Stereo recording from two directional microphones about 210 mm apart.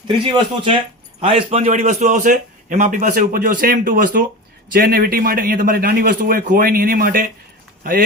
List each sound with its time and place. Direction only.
0.3 s a man's voice: 25° right (ahead or behind); by 7.3 s 40° right (ahead or behind)